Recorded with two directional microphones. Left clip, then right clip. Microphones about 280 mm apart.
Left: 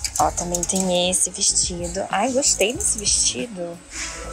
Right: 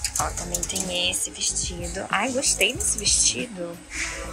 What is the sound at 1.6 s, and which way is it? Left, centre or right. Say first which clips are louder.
A woman's voice: left 3 dB; centre.